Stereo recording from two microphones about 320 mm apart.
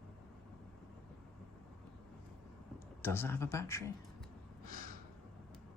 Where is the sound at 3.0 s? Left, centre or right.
Centre.